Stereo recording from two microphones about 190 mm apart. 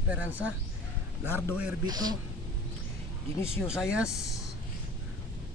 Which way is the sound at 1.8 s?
20° right (ahead or behind).